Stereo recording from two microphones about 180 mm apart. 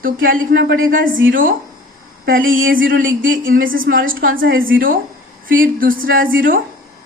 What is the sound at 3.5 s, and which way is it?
Speech, 90° right.